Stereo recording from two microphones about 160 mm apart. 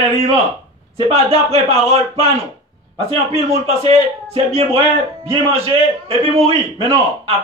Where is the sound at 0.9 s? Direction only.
35° right (ahead or behind).